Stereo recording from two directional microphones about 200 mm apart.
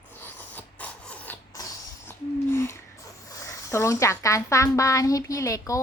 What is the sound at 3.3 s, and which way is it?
Speech, 15° left (ahead or behind).